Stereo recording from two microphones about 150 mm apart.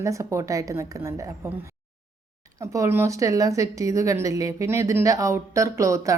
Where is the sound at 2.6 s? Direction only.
20° right (ahead or behind).